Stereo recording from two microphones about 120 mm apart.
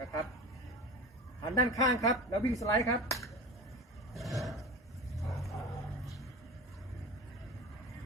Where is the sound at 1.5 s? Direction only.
30° left (ahead or behind).